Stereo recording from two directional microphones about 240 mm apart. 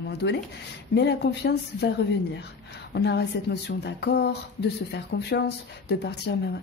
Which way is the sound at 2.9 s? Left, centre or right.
Left.